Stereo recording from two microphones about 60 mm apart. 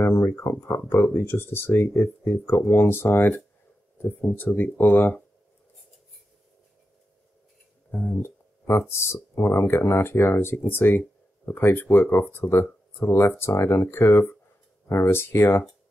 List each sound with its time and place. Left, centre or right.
0.0 s a sound: left
0.8 s speech: left
7.9 s speech: left